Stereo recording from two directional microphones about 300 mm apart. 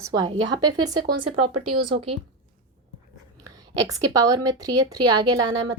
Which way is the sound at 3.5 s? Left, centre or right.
Centre.